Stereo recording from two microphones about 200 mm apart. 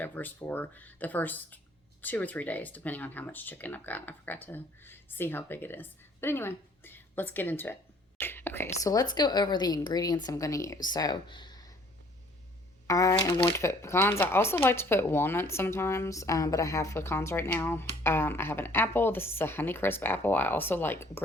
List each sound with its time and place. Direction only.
0.0 s a woman's voice: 10° left (ahead or behind)
12.9 s speech: 15° left (ahead or behind)